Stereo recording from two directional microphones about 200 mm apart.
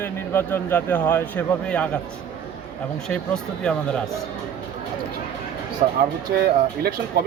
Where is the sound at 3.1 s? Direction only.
5° left (ahead or behind).